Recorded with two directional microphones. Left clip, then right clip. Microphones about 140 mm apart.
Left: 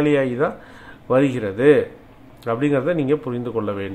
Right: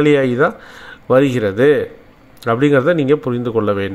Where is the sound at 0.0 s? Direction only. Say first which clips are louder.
Right 6 dB; 35° right (ahead or behind).